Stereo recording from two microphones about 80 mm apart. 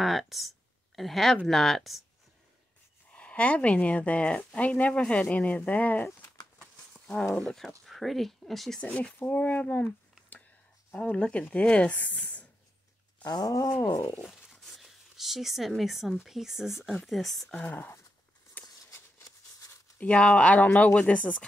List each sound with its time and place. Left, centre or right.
0.0 s speech: centre
3.1 s a woman's voice: centre
6.6 s a sound: centre
7.8 s speech: centre
8.8 s speech: centre
10.9 s a woman's voice: centre
13.2 s a sound: left
14.2 s speech: centre
17.6 s speech: left
18.9 s a sound: left
20.0 s a woman's voice: centre